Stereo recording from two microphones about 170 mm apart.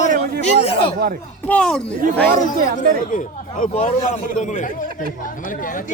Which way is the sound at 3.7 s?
40° left (ahead or behind).